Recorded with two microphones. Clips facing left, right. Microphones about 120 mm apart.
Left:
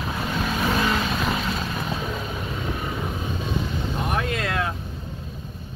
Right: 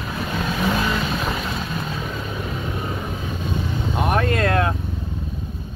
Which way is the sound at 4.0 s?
55° right (ahead or behind).